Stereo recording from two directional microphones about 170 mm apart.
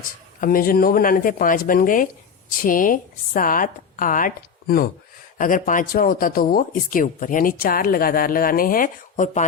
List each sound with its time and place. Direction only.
0.3 s a woman's voice: 55° left (ahead or behind)
5.4 s speech: 50° left (ahead or behind)